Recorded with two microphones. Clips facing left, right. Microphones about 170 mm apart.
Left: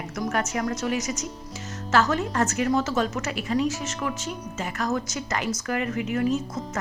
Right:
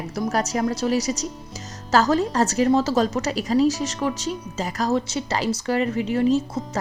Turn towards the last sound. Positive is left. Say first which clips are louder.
# right 5 dB
turn(degrees=-30)  # may be behind; listen again after turning